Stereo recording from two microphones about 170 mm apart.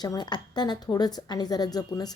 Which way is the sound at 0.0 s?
25° left (ahead or behind).